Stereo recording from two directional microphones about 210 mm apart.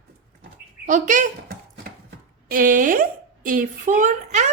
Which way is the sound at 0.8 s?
40° right (ahead or behind).